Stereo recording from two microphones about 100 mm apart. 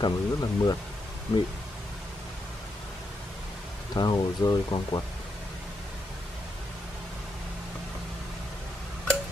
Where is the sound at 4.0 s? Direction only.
40° left (ahead or behind).